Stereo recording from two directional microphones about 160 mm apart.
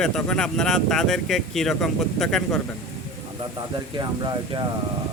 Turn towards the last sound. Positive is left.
turn(degrees=-25)  # may be behind; listen again after turning